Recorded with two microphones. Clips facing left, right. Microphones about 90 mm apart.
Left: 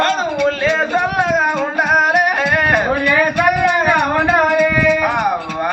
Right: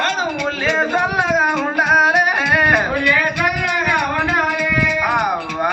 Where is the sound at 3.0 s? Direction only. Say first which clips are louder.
Left 3 dB; 40° left (ahead or behind).